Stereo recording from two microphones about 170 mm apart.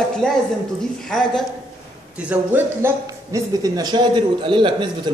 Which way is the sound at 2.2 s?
10° right (ahead or behind).